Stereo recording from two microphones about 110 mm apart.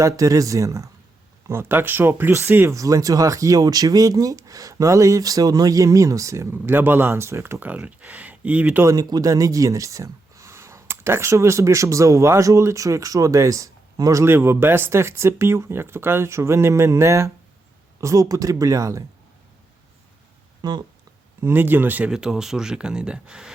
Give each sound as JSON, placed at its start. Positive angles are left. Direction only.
{"t": 0.0, "sound": "speech", "side_deg": -30}
{"t": 8.8, "sound": "speech", "side_deg": -35}
{"t": 20.6, "sound": "speech", "side_deg": -40}
{"t": 21.4, "sound": "speech", "side_deg": -20}